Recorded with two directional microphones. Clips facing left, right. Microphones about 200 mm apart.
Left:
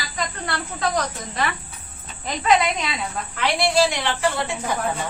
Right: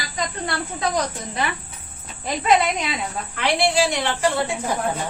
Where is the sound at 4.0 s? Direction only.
40° right (ahead or behind).